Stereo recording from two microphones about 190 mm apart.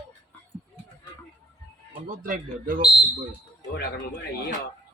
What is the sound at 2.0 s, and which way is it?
Speech, 45° right (ahead or behind).